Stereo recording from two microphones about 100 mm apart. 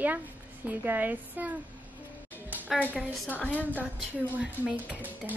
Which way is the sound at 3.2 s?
15° left (ahead or behind).